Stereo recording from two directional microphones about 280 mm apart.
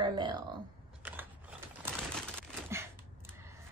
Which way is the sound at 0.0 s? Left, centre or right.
Centre.